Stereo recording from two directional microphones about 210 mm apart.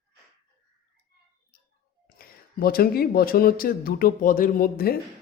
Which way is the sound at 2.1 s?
45° left (ahead or behind).